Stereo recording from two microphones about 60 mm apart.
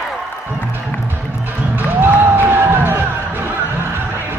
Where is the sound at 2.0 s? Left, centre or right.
Right.